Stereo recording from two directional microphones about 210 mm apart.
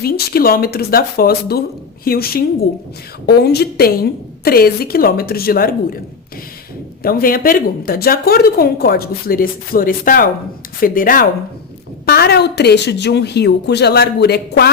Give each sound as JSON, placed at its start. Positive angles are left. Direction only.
{"t": 0.0, "sound": "a woman's voice", "side_deg": 45}
{"t": 7.0, "sound": "a woman's voice", "side_deg": 45}